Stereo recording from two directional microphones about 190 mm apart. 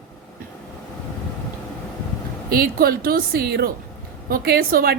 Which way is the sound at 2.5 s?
50° right (ahead or behind).